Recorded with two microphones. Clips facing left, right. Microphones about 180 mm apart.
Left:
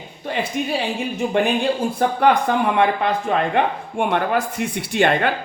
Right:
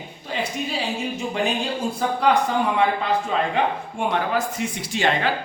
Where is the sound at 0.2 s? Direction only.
60° left (ahead or behind).